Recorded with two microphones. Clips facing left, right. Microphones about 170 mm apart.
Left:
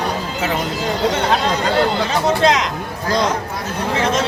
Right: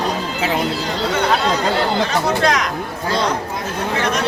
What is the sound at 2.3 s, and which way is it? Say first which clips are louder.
Speech: left 6 dB; 20° left (ahead or behind).